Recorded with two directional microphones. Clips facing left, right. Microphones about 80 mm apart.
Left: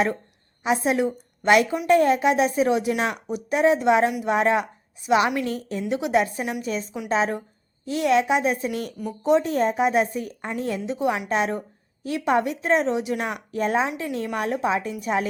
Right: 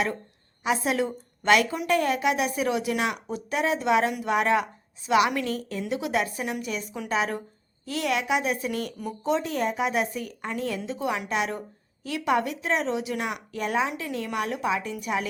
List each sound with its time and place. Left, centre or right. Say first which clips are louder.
0.6 s a woman's voice: left 3 dB; left